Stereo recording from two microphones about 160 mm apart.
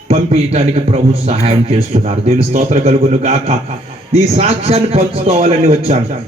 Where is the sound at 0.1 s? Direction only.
40° right (ahead or behind).